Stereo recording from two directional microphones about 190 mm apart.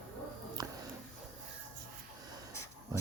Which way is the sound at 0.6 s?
20° right (ahead or behind).